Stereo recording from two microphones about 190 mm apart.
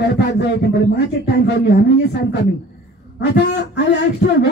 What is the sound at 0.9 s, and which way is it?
Speech, 60° left (ahead or behind).